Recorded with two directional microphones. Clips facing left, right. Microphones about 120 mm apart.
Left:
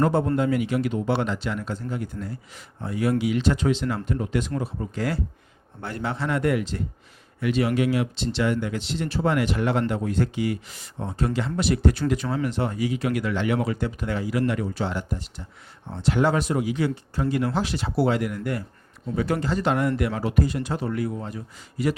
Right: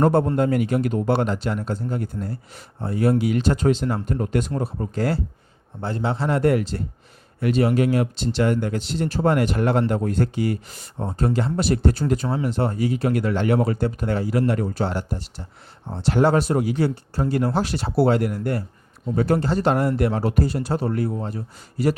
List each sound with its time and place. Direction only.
0.0 s speech: 55° right (ahead or behind)
4.5 s speech: 35° right (ahead or behind)